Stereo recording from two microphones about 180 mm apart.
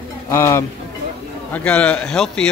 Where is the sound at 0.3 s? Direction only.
15° left (ahead or behind).